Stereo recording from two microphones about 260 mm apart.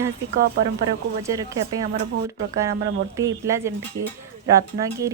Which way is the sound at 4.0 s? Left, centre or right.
Right.